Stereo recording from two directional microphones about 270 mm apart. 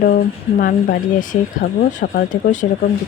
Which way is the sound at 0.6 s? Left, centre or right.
Left.